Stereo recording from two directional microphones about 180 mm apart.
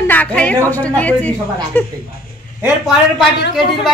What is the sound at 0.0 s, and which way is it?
Speech, 10° left (ahead or behind).